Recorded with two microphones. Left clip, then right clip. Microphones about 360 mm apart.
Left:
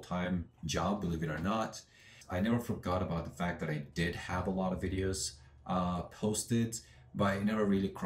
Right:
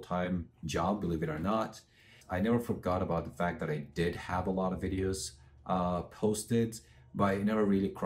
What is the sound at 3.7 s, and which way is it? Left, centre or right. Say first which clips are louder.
Speech: right 3 dB; left.